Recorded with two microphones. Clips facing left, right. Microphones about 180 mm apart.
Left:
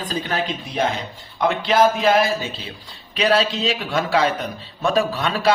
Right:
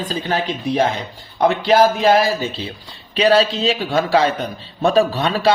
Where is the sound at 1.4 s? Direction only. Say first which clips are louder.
Right 3 dB; 35° right (ahead or behind).